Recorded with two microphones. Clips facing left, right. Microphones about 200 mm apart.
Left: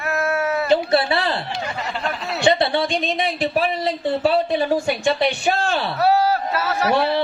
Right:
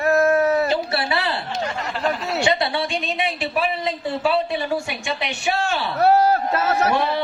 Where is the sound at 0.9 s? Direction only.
35° left (ahead or behind).